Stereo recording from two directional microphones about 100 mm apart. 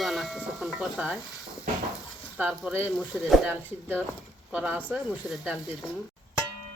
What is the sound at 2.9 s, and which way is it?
Speech, centre (ahead or behind).